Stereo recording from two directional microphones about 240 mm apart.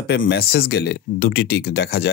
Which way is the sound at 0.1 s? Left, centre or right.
Left.